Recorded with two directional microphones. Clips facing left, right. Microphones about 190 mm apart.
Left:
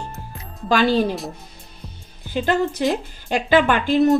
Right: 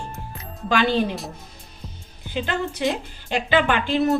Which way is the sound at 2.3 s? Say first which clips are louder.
Left 6 dB; 45° left (ahead or behind).